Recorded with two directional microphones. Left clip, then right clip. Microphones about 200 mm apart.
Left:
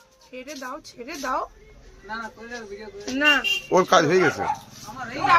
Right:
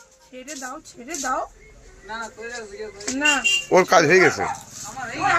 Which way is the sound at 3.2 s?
20° left (ahead or behind).